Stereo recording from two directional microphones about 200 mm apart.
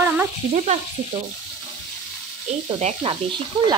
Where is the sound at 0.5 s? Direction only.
35° right (ahead or behind).